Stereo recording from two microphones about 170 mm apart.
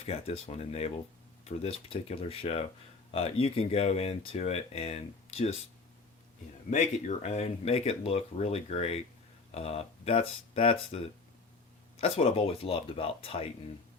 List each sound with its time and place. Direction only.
0.0 s speech: 35° left (ahead or behind)
6.7 s speech: 40° left (ahead or behind)
11.9 s speech: 35° left (ahead or behind)